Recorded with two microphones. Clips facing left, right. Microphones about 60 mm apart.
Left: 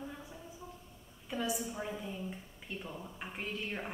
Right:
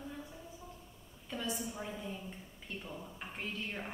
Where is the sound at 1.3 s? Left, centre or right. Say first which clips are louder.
Left 3 dB; centre.